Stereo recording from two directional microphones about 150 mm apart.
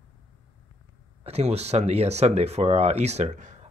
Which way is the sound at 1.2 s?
45° right (ahead or behind).